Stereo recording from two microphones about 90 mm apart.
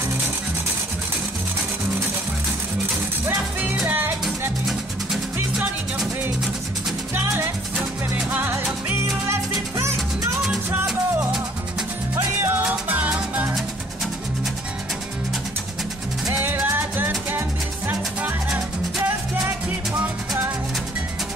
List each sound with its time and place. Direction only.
3.3 s music: 20° right (ahead or behind)
7.2 s music: 25° right (ahead or behind)
12.4 s music: 25° right (ahead or behind)
16.6 s music: 25° right (ahead or behind)